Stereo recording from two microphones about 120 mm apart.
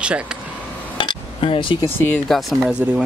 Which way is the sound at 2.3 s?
Centre (ahead or behind).